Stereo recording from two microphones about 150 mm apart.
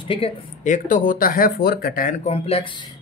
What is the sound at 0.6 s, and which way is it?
Speech, 55° left (ahead or behind).